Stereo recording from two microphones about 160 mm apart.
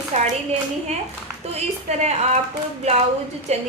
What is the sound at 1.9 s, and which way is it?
A woman's voice, 40° right (ahead or behind).